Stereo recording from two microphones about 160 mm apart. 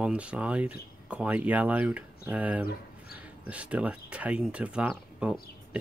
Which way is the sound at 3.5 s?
10° right (ahead or behind).